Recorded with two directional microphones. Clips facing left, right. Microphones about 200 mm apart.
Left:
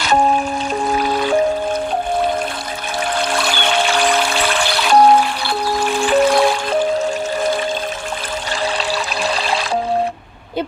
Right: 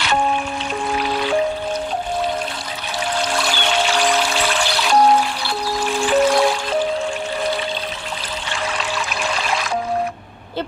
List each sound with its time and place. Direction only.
0.0 s music: 40° left (ahead or behind)
3.2 s music: 60° left (ahead or behind)
8.9 s music: 35° left (ahead or behind)